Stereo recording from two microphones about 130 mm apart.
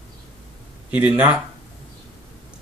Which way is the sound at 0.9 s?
10° right (ahead or behind).